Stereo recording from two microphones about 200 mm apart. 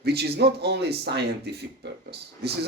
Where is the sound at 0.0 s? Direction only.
55° right (ahead or behind).